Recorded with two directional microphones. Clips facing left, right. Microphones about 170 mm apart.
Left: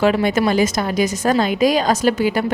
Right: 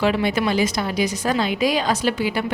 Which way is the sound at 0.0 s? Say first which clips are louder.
Left 4 dB; 45° left (ahead or behind).